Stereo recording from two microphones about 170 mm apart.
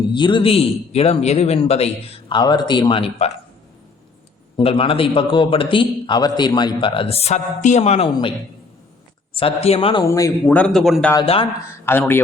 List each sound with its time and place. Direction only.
0.1 s a man's voice: 25° left (ahead or behind)
2.4 s a man's voice: 25° left (ahead or behind)
4.5 s a man's voice: 35° left (ahead or behind)
9.3 s a man's voice: 35° left (ahead or behind)
10.0 s a man's voice: 15° left (ahead or behind); by 11.1 s centre (ahead or behind)
11.7 s speech: 15° left (ahead or behind)